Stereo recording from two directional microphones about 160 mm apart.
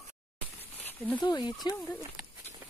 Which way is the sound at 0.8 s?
10° left (ahead or behind).